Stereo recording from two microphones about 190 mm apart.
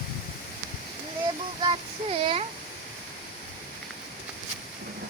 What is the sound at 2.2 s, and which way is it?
Speech, 30° right (ahead or behind).